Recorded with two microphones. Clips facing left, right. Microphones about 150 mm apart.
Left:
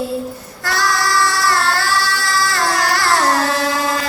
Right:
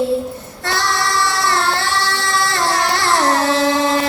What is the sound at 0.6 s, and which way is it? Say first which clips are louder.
Child singing: left 1 dB; 25° right (ahead or behind).